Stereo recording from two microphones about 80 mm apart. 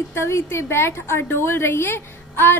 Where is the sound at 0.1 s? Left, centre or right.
Left.